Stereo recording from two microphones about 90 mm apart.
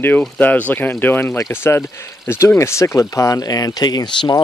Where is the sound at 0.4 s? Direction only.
15° left (ahead or behind).